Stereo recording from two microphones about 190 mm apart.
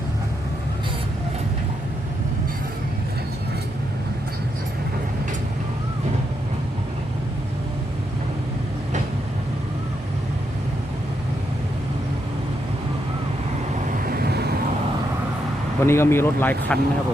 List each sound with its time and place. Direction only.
14.0 s vehicle: 55° right (ahead or behind)
15.8 s speech: 15° left (ahead or behind)